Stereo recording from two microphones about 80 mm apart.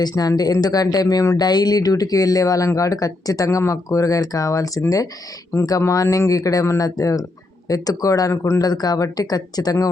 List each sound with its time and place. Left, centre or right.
0.0 s speech: left
1.4 s speech: left
8.3 s speech: left
8.6 s speech: left